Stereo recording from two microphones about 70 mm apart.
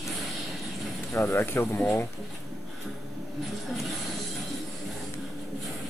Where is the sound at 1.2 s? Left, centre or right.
Left.